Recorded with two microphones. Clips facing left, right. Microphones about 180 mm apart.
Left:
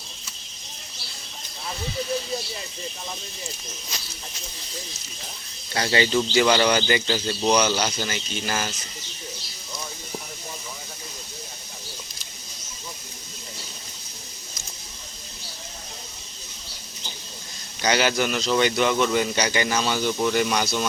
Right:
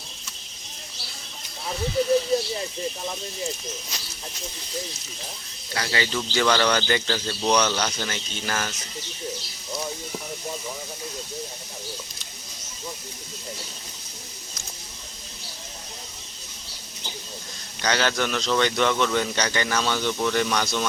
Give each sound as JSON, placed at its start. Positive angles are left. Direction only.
{"t": 5.7, "sound": "speech", "side_deg": 25}
{"t": 6.3, "sound": "a man's voice", "side_deg": 10}
{"t": 17.8, "sound": "a man's voice", "side_deg": 10}